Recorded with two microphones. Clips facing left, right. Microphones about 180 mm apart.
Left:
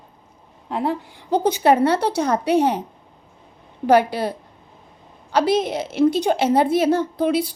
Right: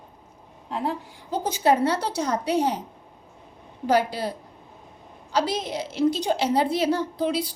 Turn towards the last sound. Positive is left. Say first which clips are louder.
# left 5 dB
turn(degrees=55)  # may be behind; listen again after turning